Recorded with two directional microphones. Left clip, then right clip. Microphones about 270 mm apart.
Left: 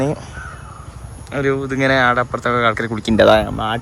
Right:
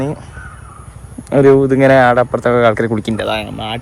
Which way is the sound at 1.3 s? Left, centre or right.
Centre.